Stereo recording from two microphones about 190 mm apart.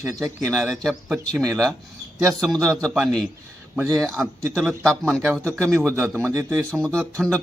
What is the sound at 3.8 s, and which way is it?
Speech, 15° right (ahead or behind).